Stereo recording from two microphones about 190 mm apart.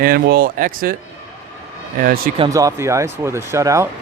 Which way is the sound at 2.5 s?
15° right (ahead or behind).